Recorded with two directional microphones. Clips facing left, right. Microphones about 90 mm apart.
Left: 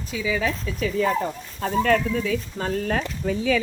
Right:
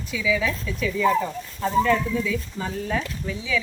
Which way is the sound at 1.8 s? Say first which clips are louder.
Left 2 dB; 55° left (ahead or behind).